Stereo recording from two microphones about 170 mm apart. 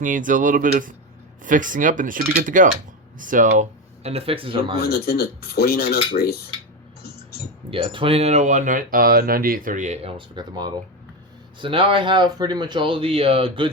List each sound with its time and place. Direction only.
0.0 s speech: 50° right (ahead or behind); by 4.8 s 30° right (ahead or behind)
4.8 s dishes: 65° left (ahead or behind)
7.7 s speech: 30° right (ahead or behind)